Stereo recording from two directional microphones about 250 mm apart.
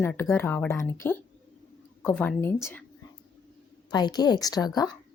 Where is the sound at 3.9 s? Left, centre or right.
Centre.